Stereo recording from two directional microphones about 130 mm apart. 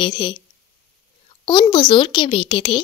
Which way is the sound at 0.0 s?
40° left (ahead or behind).